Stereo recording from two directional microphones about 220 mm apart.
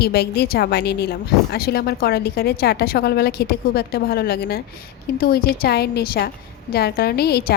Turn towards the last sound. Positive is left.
turn(degrees=45)  # may be behind; listen again after turning